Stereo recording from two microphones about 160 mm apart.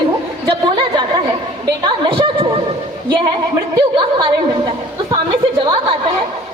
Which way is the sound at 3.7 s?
30° right (ahead or behind).